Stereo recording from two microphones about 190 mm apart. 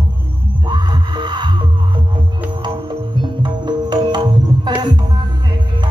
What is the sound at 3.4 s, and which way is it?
Music, 25° right (ahead or behind).